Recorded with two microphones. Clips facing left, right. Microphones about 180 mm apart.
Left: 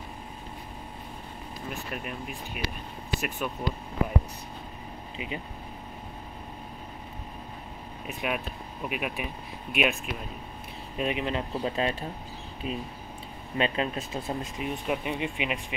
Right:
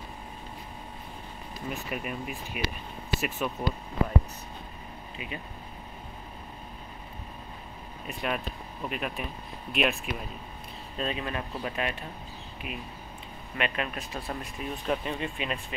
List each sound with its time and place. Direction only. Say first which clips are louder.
1.7 s speech: right 2 dB; centre (ahead or behind)
5.1 s speech: left 3 dB; 20° left (ahead or behind)
8.1 s speech: even; 5° left (ahead or behind)
11.0 s speech: left 3 dB; 20° left (ahead or behind)